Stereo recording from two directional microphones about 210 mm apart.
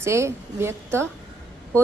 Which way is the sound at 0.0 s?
15° right (ahead or behind).